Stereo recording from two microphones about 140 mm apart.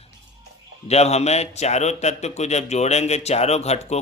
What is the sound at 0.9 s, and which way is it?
A man's voice, 50° left (ahead or behind).